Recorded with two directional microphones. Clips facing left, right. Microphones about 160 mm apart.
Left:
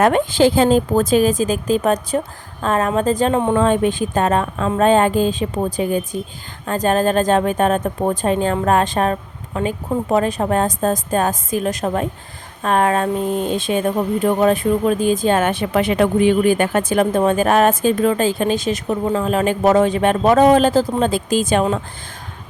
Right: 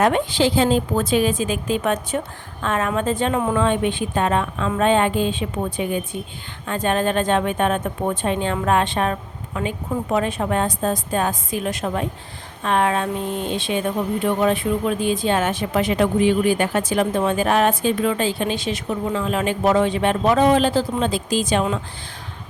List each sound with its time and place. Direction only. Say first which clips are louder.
0.0 s speech: left 4 dB; 45° left (ahead or behind)